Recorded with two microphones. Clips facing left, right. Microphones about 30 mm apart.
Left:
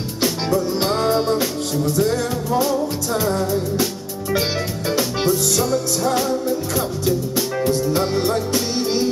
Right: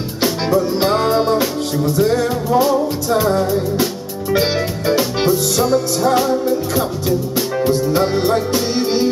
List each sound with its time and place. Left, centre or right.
0.2 s music: centre